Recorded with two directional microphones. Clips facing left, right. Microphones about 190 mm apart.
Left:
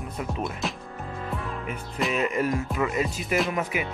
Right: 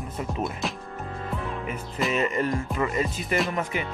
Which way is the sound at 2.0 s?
Centre (ahead or behind).